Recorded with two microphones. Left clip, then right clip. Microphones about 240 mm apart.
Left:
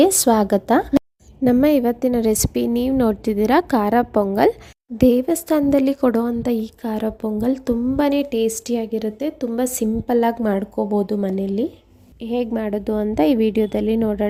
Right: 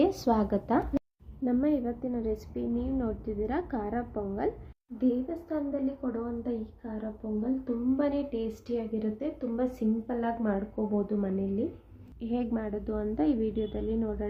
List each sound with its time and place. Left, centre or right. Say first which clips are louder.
0.0 s a woman's voice: left 11 dB; left
12.6 s speech: left 11 dB; left